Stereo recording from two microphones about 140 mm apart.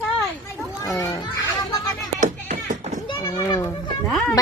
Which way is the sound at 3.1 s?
20° left (ahead or behind).